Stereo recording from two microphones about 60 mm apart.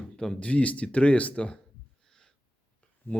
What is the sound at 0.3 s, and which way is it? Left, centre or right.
Speech, left.